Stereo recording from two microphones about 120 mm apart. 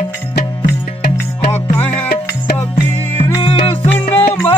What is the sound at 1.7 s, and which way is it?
Music, 15° left (ahead or behind).